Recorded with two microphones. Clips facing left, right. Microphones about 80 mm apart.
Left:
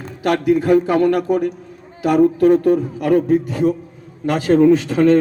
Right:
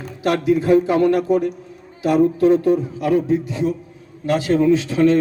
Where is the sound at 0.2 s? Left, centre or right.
Left.